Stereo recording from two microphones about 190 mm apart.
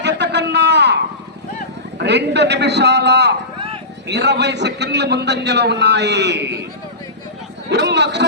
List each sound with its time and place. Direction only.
0.0 s a sound: 65° right (ahead or behind)
2.0 s a man's voice: 65° right (ahead or behind)
7.7 s a man's voice: 65° right (ahead or behind)